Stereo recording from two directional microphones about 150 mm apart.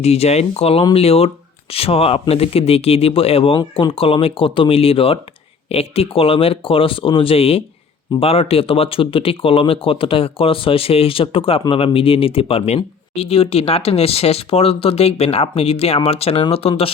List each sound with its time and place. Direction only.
0.0 s speech: 45° left (ahead or behind)